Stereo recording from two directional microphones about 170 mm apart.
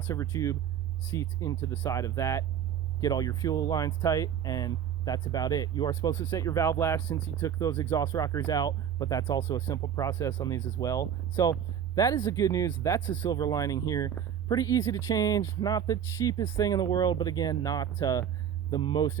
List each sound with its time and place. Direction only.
0.1 s speech: 20° left (ahead or behind)